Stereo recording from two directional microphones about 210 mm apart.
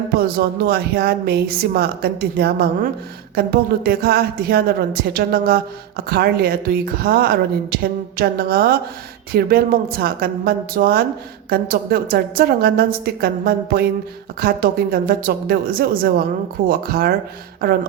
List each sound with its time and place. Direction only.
0.2 s a woman's voice: 50° right (ahead or behind)